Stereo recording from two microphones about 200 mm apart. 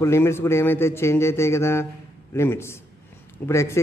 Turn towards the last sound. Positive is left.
turn(degrees=15)  # may be behind; listen again after turning